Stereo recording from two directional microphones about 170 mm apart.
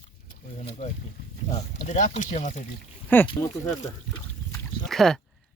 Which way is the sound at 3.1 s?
10° left (ahead or behind).